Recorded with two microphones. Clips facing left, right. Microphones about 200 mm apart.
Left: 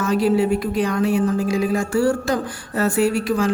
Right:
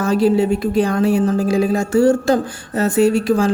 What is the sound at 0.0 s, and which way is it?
Speech, 30° right (ahead or behind).